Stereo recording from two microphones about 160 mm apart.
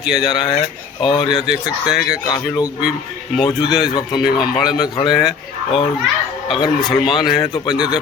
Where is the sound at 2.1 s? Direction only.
25° left (ahead or behind).